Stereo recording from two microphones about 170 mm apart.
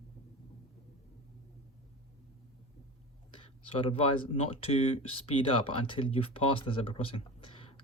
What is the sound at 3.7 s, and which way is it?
Speech, 35° left (ahead or behind).